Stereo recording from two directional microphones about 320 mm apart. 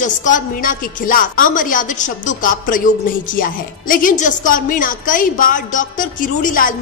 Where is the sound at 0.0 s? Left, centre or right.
Left.